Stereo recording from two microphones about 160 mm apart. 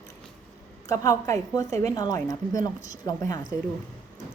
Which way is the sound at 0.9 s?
20° left (ahead or behind).